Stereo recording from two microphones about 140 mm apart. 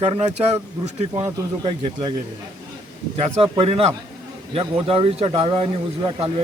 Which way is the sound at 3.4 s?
40° right (ahead or behind).